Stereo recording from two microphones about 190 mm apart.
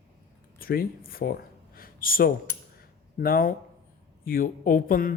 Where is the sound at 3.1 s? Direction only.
50° left (ahead or behind).